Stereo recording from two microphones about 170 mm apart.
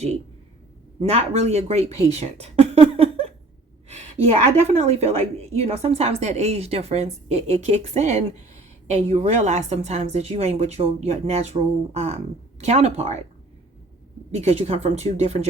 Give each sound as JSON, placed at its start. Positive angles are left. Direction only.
{"t": 1.0, "sound": "a woman's voice", "side_deg": -40}
{"t": 14.4, "sound": "a woman's voice", "side_deg": -35}